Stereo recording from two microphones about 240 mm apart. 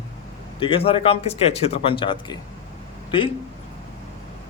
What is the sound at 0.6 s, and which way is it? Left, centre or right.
Speech, left.